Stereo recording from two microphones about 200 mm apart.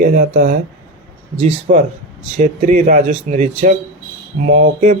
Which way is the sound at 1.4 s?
30° right (ahead or behind).